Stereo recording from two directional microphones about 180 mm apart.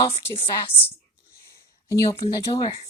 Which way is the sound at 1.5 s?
15° left (ahead or behind).